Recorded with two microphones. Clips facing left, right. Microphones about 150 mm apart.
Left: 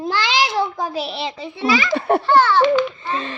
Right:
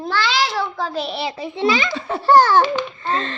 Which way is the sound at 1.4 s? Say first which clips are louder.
Even; 25° right (ahead or behind).